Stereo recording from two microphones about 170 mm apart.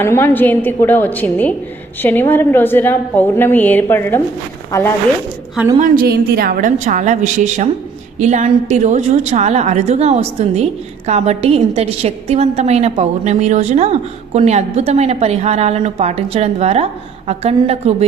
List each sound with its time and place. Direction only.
0.0 s a woman's voice: 15° left (ahead or behind)
5.8 s a woman's voice: 60° right (ahead or behind); by 17.9 s 40° right (ahead or behind)